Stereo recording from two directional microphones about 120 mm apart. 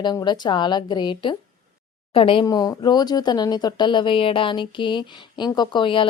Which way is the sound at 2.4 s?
30° left (ahead or behind).